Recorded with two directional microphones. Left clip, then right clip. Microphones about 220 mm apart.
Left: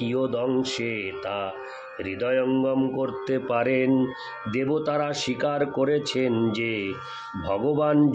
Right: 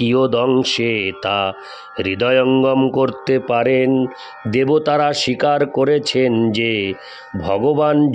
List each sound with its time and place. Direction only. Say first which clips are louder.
0.0 s speech: right 10 dB; 50° right (ahead or behind); by 4.0 s 30° right (ahead or behind)
4.5 s speech: right 10 dB; 40° right (ahead or behind)